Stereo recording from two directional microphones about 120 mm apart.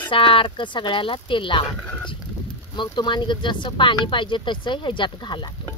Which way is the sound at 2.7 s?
40° left (ahead or behind).